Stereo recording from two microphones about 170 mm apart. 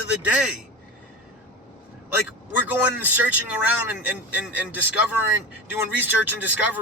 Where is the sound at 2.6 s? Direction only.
10° right (ahead or behind).